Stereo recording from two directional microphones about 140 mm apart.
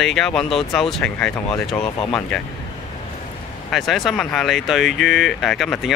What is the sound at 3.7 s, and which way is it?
Speech, centre (ahead or behind).